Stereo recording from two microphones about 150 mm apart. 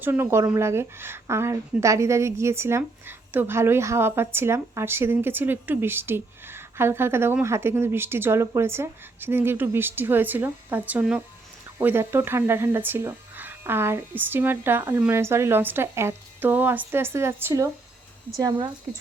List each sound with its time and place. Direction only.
0.0 s a woman's voice: 15° right (ahead or behind)